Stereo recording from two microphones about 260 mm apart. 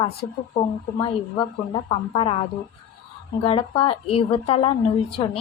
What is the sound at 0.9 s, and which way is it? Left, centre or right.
A woman's voice, centre.